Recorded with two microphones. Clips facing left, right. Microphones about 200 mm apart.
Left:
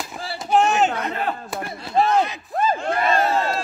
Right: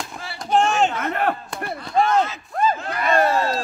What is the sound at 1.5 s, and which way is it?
Speech, 5° left (ahead or behind).